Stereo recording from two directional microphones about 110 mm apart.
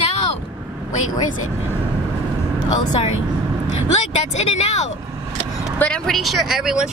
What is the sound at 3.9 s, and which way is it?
Speech, 85° left.